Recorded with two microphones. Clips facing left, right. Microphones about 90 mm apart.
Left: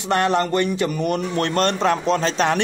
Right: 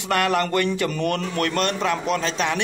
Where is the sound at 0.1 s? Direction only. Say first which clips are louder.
Left 2 dB; 25° left (ahead or behind).